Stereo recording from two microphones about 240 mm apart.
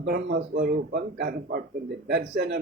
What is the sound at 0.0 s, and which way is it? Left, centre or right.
Speech, right.